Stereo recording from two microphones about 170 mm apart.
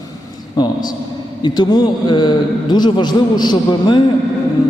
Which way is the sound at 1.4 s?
25° left (ahead or behind).